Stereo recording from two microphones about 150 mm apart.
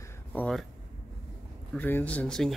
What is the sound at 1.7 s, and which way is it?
Speech, 10° left (ahead or behind).